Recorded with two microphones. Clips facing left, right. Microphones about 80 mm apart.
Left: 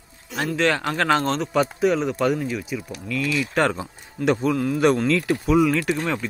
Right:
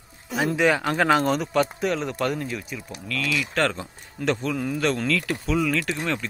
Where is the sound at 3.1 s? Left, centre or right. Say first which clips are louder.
Left 3 dB; left.